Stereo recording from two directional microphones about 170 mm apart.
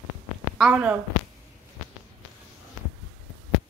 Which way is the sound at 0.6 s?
5° right (ahead or behind).